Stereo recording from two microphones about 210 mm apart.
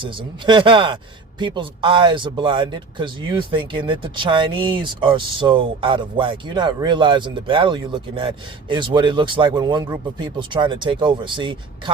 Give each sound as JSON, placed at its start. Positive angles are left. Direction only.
{"t": 0.0, "sound": "speech", "side_deg": -25}